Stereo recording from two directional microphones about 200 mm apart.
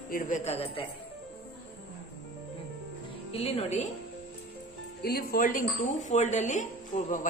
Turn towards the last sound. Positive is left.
turn(degrees=40)  # may be behind; listen again after turning